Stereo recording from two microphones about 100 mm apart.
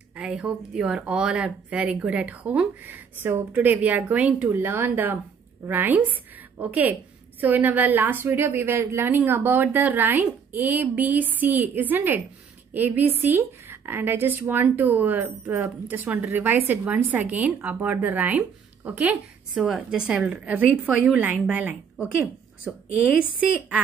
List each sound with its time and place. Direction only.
0.1 s a woman's voice: 10° right (ahead or behind)
4.5 s a woman's voice: 25° right (ahead or behind)
19.7 s a woman's voice: 5° right (ahead or behind)